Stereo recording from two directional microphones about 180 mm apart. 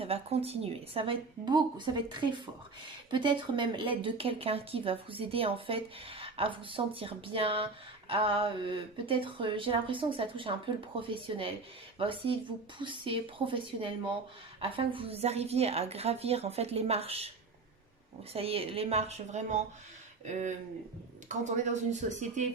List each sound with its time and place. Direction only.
0.0 s a woman's voice: 35° right (ahead or behind)
18.3 s a woman's voice: 30° right (ahead or behind)
21.2 s a woman's voice: 40° right (ahead or behind)